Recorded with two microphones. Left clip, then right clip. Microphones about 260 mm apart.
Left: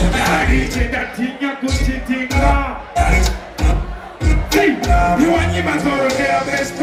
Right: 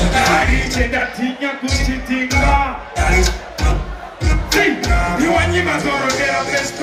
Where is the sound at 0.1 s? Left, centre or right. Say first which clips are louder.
Right 3 dB; centre.